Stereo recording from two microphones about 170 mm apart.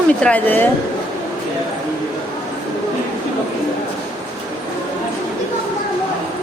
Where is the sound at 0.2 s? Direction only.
10° left (ahead or behind).